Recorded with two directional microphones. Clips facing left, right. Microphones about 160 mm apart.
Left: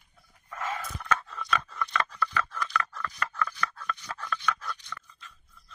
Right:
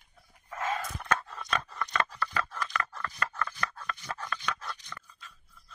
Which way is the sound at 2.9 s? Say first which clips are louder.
Left 2 dB; 25° right (ahead or behind).